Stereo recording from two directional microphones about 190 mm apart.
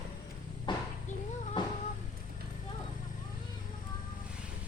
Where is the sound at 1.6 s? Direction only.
25° left (ahead or behind).